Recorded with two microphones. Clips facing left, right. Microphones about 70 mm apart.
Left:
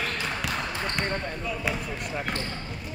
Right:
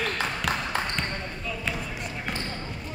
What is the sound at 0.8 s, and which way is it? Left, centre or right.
Basketball bounce, centre.